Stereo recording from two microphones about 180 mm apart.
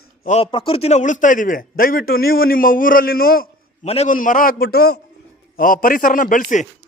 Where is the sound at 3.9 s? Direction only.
35° left (ahead or behind).